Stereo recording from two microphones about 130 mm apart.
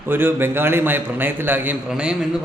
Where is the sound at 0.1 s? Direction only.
15° right (ahead or behind).